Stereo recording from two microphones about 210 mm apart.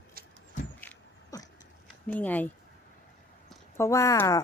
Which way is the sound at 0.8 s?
10° left (ahead or behind).